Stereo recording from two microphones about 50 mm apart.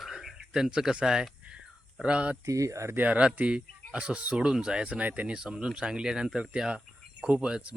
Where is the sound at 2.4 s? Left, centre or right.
Right.